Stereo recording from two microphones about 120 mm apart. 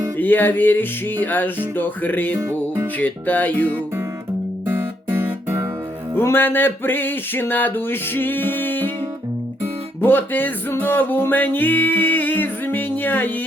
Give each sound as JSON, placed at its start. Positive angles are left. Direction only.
{"t": 0.2, "sound": "music", "side_deg": 15}
{"t": 2.4, "sound": "music", "side_deg": -25}
{"t": 2.8, "sound": "music", "side_deg": 15}
{"t": 4.6, "sound": "guitar", "side_deg": -20}
{"t": 6.1, "sound": "music", "side_deg": 20}
{"t": 10.0, "sound": "music", "side_deg": 15}